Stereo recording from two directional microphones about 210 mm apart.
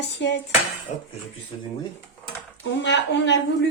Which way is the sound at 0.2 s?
55° left (ahead or behind).